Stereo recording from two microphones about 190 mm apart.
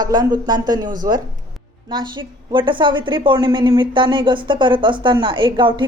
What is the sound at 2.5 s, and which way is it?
Speech, 25° right (ahead or behind).